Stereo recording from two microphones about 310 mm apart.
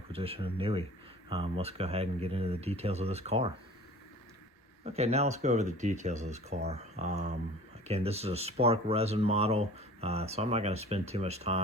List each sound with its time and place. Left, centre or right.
0.1 s speech: centre
4.8 s speech: right